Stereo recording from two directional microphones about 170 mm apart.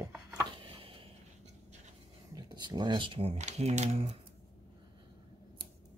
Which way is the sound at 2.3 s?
25° right (ahead or behind).